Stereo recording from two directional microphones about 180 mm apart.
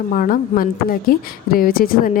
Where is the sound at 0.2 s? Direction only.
50° left (ahead or behind).